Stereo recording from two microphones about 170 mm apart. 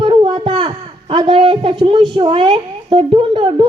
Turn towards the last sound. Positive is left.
turn(degrees=-30)  # may be behind; listen again after turning